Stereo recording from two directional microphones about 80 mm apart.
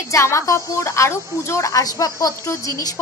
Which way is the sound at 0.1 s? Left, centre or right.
Left.